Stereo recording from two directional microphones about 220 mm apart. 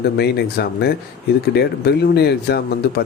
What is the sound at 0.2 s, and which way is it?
A man's voice, 45° left (ahead or behind).